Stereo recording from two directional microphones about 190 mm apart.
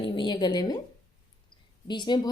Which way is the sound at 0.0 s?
25° left (ahead or behind).